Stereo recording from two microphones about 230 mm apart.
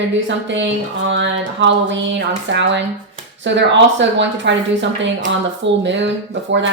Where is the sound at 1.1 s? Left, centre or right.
Right.